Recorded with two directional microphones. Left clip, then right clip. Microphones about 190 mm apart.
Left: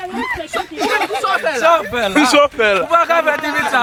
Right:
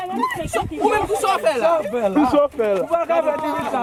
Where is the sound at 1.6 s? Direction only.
40° left (ahead or behind).